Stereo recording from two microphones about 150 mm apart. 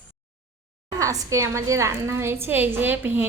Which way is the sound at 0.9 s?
20° right (ahead or behind).